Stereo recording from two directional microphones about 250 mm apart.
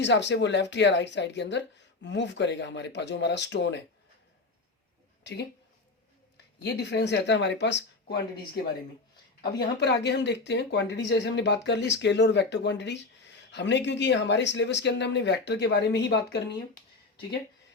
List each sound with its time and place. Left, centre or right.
0.0 s speech: left
5.2 s speech: left
6.6 s speech: left
9.8 s speech: left